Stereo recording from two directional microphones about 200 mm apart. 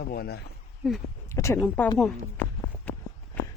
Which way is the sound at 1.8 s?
10° left (ahead or behind).